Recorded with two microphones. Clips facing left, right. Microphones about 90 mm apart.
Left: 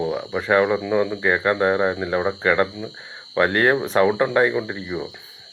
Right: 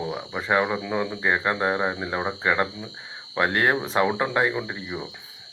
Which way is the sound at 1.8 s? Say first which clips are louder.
Left 5 dB; 50° left (ahead or behind).